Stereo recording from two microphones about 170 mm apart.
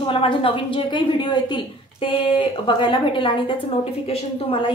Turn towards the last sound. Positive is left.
turn(degrees=30)  # may be behind; listen again after turning